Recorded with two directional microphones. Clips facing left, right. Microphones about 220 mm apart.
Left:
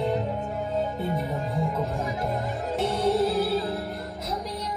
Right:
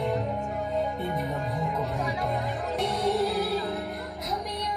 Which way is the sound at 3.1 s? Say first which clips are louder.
Left 3 dB; 30° left (ahead or behind).